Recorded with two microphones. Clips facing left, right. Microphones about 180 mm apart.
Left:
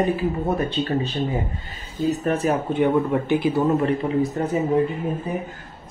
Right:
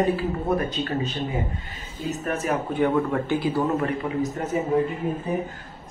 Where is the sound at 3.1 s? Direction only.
20° left (ahead or behind).